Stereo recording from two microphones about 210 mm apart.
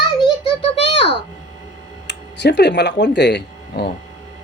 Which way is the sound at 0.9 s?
25° left (ahead or behind).